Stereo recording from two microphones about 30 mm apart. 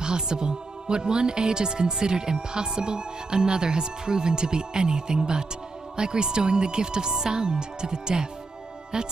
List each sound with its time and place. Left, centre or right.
0.0 s speech: right